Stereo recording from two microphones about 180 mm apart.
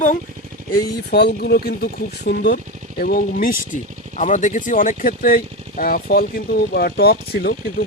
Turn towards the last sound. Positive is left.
turn(degrees=55)  # may be behind; listen again after turning